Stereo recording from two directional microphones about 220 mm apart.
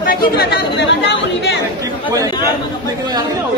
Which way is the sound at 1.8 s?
15° right (ahead or behind).